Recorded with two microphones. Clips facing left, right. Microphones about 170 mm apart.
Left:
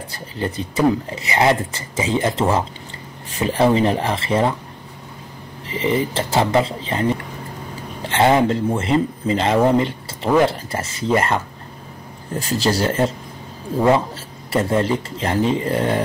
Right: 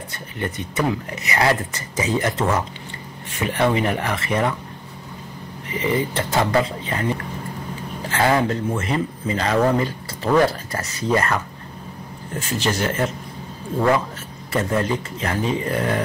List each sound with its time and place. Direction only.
0.1 s speech: 30° left (ahead or behind)
5.7 s speech: 25° left (ahead or behind)
14.5 s speech: 30° left (ahead or behind)